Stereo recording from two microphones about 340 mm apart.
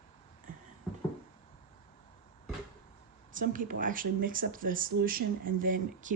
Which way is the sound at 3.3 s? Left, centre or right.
Right.